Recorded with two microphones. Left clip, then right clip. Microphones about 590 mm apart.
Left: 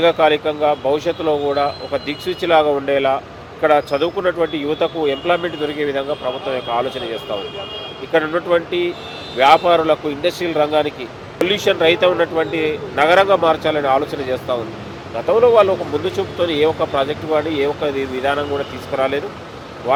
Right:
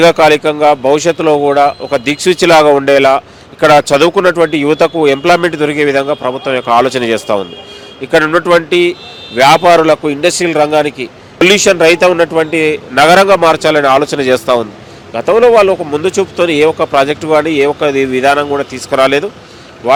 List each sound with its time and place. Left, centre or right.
0.0 s speech: right